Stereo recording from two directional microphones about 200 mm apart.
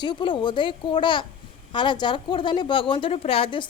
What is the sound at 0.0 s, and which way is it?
Speech, 25° left (ahead or behind).